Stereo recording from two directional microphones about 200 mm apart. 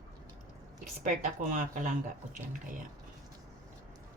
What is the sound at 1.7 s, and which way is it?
Speech, 40° right (ahead or behind).